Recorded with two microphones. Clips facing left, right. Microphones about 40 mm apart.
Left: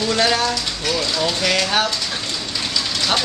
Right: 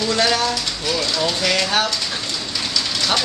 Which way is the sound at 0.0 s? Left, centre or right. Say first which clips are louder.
Even; centre.